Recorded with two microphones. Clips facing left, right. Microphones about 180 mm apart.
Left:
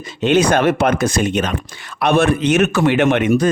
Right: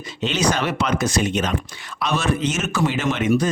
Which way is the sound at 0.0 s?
55° left (ahead or behind).